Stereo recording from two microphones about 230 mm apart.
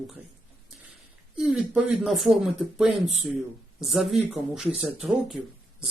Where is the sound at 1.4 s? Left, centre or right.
Centre.